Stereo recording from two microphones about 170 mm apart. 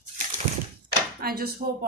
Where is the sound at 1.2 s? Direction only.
65° right (ahead or behind).